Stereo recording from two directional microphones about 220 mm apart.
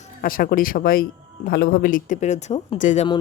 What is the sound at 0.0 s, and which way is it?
Speech, 40° left (ahead or behind).